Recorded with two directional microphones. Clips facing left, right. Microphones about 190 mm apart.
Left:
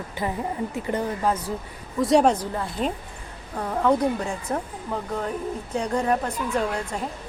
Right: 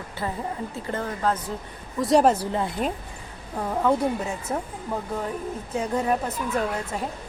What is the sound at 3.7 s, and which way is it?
Speech, 5° right (ahead or behind).